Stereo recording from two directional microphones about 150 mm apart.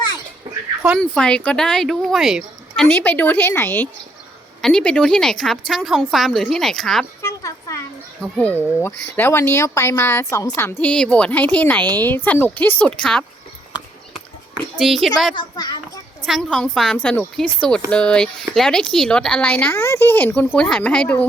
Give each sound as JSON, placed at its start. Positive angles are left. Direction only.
{"t": 0.9, "sound": "a woman's voice", "side_deg": 5}
{"t": 2.8, "sound": "a woman's voice", "side_deg": 10}
{"t": 8.2, "sound": "speech", "side_deg": 10}
{"t": 14.8, "sound": "a woman's voice", "side_deg": 0}
{"t": 15.4, "sound": "a child's voice", "side_deg": 30}
{"t": 16.2, "sound": "a woman's voice", "side_deg": 0}